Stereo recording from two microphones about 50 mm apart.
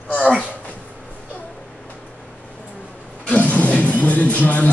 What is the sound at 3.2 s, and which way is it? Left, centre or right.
Music, left.